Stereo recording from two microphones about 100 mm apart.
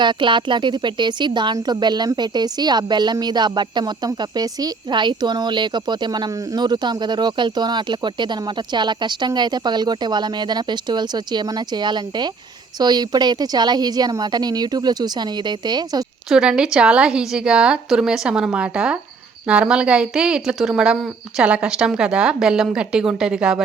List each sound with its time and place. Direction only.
0.0 s speech: 50° right (ahead or behind)
16.3 s a woman's voice: 10° right (ahead or behind)